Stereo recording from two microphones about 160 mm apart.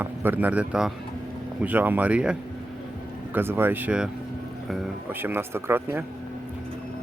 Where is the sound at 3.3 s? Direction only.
15° right (ahead or behind).